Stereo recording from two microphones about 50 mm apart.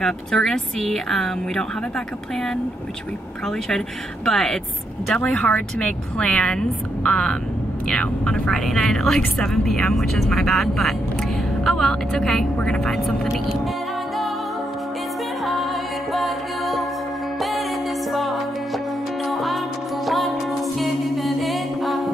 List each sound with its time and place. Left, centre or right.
0.0 s speech: centre
3.4 s speech: centre
5.4 s a woman's voice: left
16.1 s music: centre